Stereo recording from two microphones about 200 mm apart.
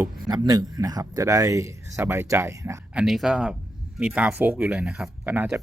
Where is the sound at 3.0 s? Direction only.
Centre (ahead or behind).